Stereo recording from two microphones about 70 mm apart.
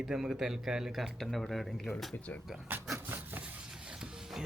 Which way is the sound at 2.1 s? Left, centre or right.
Left.